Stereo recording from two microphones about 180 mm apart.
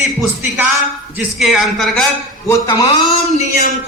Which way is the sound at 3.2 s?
40° left (ahead or behind).